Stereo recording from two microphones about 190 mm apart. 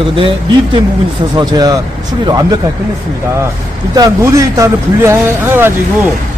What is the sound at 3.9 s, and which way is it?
A man's voice, 20° right (ahead or behind).